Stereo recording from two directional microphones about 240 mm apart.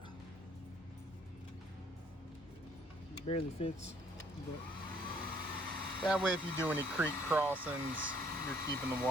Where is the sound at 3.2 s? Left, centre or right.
Left.